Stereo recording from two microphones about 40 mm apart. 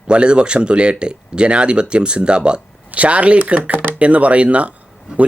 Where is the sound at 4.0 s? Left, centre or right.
Right.